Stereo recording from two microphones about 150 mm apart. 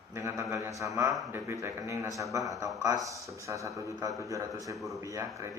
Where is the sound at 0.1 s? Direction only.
15° right (ahead or behind).